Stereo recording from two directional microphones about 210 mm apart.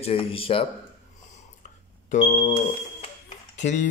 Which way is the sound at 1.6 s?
35° left (ahead or behind).